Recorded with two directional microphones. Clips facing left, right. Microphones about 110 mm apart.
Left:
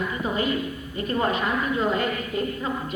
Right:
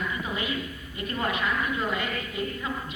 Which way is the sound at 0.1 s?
35° left (ahead or behind).